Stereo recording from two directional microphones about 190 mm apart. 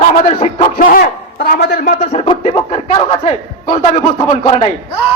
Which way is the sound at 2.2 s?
30° left (ahead or behind).